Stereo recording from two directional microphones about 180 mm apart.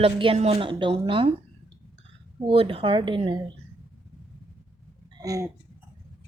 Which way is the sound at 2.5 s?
30° right (ahead or behind).